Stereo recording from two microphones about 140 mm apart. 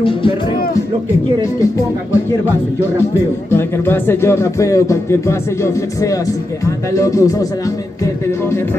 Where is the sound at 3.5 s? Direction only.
15° left (ahead or behind).